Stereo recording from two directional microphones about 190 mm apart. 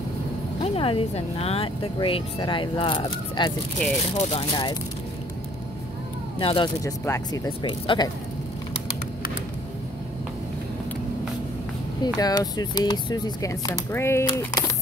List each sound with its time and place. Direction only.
0.6 s speech: 30° left (ahead or behind)
6.4 s speech: 25° left (ahead or behind)
12.0 s speech: 20° left (ahead or behind)